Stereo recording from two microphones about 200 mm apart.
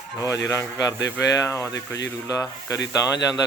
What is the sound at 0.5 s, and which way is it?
Speech, 15° left (ahead or behind).